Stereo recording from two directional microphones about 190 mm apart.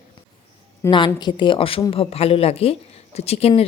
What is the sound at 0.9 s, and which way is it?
Speech, 25° left (ahead or behind).